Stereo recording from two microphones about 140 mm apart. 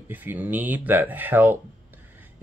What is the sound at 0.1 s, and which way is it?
Speech, 15° right (ahead or behind).